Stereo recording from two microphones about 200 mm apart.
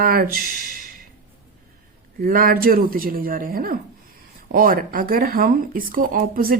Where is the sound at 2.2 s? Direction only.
45° right (ahead or behind).